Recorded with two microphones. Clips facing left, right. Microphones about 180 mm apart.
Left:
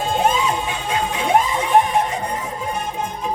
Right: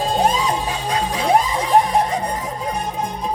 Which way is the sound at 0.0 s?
35° right (ahead or behind).